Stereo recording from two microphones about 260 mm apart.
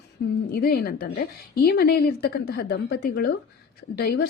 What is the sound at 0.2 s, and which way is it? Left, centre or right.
A woman's voice, left.